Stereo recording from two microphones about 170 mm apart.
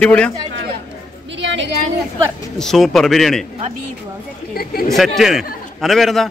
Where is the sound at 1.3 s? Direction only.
90° right.